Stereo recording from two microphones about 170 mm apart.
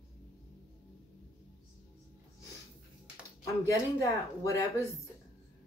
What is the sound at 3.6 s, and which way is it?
Speech, 20° left (ahead or behind).